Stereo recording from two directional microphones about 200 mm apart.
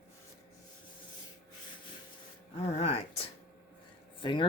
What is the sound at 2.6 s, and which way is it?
Speech, 30° left (ahead or behind).